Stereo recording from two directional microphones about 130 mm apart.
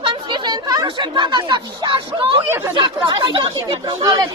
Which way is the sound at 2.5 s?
20° right (ahead or behind).